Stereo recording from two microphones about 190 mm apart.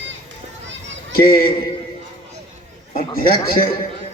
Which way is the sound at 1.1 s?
50° left (ahead or behind).